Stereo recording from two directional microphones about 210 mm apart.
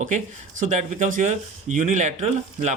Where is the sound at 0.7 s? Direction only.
35° right (ahead or behind).